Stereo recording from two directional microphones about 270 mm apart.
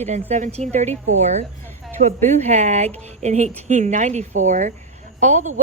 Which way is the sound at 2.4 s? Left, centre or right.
Right.